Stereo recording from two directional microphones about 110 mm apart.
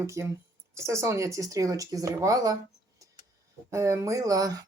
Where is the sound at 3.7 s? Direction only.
25° right (ahead or behind).